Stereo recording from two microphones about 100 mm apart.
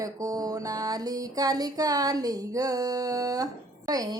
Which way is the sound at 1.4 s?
40° right (ahead or behind).